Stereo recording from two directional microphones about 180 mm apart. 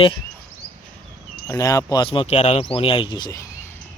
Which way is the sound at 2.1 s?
30° left (ahead or behind).